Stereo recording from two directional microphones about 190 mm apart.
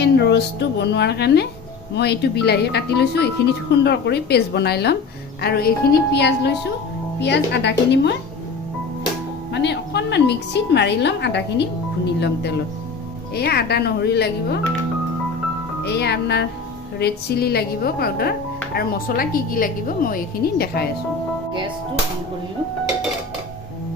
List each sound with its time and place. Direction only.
0.0 s a woman's voice: 60° left (ahead or behind)
9.5 s a woman's voice: 65° left (ahead or behind)
15.8 s a woman's voice: 60° left (ahead or behind)